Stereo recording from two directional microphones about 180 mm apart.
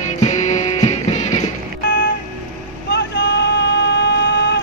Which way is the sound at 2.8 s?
75° left (ahead or behind).